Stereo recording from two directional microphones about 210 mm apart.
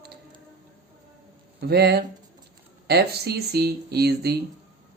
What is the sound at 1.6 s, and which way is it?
Speech, 50° right (ahead or behind).